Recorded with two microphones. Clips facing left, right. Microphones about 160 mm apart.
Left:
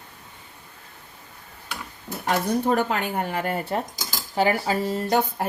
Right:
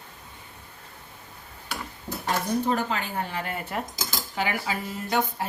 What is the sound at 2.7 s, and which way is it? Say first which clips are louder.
Speech: left 4 dB; 60° left (ahead or behind).